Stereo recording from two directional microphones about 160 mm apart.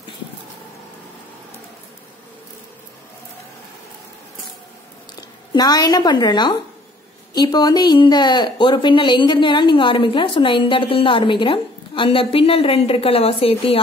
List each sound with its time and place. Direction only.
5.5 s a woman's voice: 25° left (ahead or behind)